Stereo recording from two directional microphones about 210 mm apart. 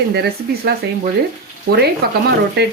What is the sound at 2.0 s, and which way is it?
Speech, 50° right (ahead or behind).